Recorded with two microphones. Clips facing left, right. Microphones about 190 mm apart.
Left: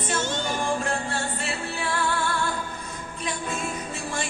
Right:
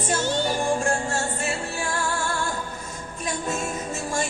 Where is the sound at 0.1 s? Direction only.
35° right (ahead or behind).